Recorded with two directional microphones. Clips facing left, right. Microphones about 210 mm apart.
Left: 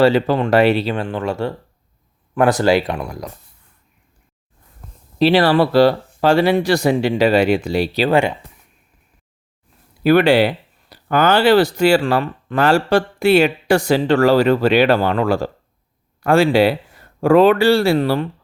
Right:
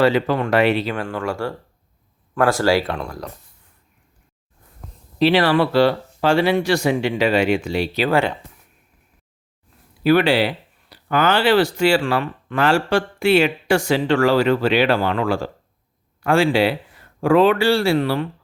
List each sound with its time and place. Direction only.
0.0 s speech: 30° left (ahead or behind); by 3.2 s 10° left (ahead or behind)
5.2 s speech: 35° left (ahead or behind)
8.1 s speech: 15° left (ahead or behind)
10.0 s speech: 50° left (ahead or behind)